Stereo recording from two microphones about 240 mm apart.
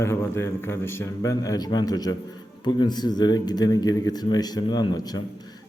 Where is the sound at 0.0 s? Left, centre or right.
Centre.